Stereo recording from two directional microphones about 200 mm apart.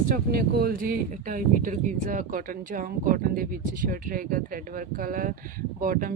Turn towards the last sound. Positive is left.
turn(degrees=-45)  # may be behind; listen again after turning